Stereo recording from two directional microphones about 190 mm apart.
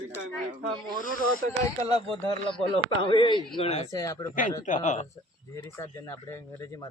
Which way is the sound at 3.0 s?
25° left (ahead or behind).